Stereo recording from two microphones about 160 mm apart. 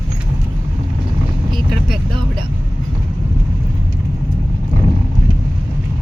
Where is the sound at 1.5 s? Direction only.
Centre (ahead or behind).